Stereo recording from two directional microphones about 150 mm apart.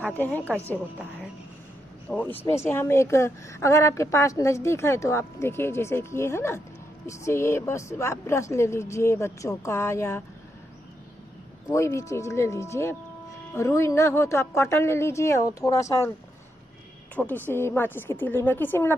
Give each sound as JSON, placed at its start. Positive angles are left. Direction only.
{"t": 0.2, "sound": "a woman's voice", "side_deg": 10}
{"t": 2.0, "sound": "a woman's voice", "side_deg": 10}
{"t": 11.7, "sound": "a woman's voice", "side_deg": 20}
{"t": 17.1, "sound": "a woman's voice", "side_deg": 10}